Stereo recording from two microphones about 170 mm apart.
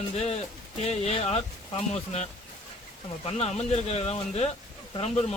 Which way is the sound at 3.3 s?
35° left (ahead or behind).